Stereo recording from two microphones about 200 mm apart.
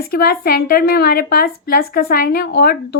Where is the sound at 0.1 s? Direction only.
50° left (ahead or behind).